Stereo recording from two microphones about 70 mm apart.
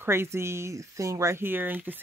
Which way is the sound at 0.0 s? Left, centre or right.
Right.